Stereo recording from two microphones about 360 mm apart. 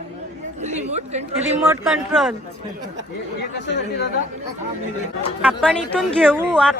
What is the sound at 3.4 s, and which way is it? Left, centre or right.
Speech, left.